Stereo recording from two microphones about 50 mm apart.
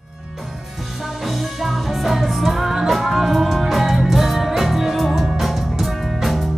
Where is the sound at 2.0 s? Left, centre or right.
Centre.